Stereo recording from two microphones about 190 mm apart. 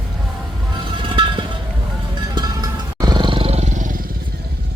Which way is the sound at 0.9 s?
25° right (ahead or behind).